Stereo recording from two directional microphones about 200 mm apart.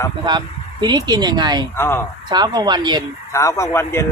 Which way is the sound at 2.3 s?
20° right (ahead or behind).